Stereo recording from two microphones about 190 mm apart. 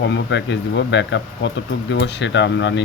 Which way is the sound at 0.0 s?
70° left (ahead or behind).